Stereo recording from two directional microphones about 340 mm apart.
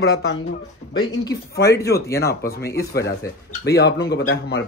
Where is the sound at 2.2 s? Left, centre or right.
Left.